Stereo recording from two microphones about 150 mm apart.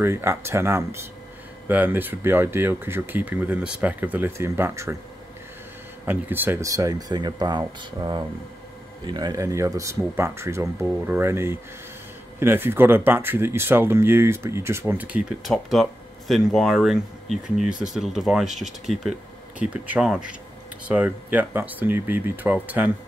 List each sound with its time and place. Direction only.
0.0 s speech: 15° right (ahead or behind)
6.0 s speech: 10° right (ahead or behind)